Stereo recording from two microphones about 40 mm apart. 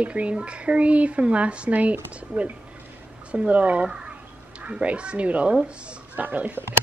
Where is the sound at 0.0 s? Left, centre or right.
Right.